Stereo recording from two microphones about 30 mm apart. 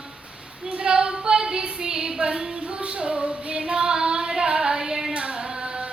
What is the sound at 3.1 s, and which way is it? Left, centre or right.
Child singing, right.